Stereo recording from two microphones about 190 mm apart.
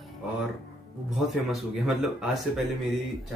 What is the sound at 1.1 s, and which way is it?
Speech, centre (ahead or behind).